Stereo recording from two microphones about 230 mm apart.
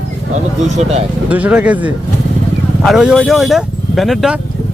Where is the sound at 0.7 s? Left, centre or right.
Right.